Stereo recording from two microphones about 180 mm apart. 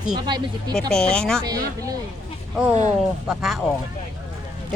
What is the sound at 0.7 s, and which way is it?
Speech, 5° left (ahead or behind).